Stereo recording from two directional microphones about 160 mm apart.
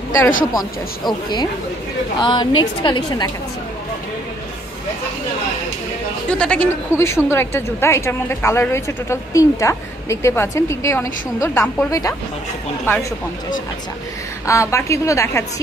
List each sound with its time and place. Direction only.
0.5 s a woman's voice: 25° left (ahead or behind)
6.2 s a woman's voice: 5° left (ahead or behind)
14.4 s a woman's voice: 20° left (ahead or behind)